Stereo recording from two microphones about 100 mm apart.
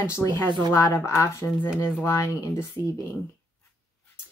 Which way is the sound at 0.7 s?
30° left (ahead or behind).